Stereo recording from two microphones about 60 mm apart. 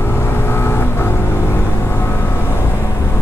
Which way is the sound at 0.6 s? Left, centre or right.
Left.